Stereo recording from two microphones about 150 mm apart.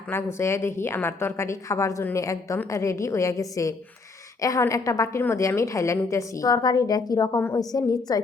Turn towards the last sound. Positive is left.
turn(degrees=25)  # may be behind; listen again after turning